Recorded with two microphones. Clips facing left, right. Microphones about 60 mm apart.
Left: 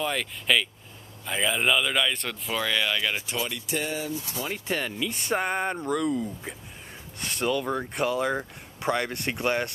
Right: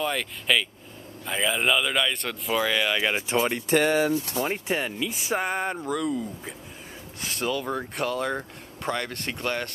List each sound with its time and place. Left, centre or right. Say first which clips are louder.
0.0 s speech: right 1 dB; centre
3.0 s speech: right 5 dB; right
3.4 s speech: right 7 dB; right
3.7 s speech: right 10 dB; right
4.6 s speech: right 1 dB; centre